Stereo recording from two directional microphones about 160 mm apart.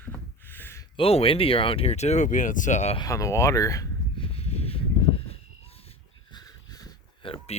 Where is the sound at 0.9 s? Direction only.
35° left (ahead or behind).